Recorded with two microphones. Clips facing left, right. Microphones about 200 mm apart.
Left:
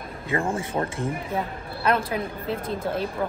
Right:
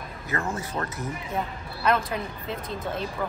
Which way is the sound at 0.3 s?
30° left (ahead or behind).